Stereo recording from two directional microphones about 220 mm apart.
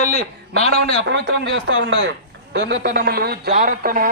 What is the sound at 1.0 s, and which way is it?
Speech, 55° right (ahead or behind).